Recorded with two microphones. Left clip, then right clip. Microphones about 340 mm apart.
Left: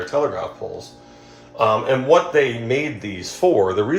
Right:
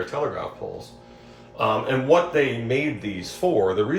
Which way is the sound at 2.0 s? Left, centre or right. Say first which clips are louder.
Left 3 dB; left.